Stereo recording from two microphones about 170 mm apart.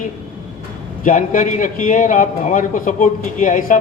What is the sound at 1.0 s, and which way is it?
A man's voice, 50° left (ahead or behind).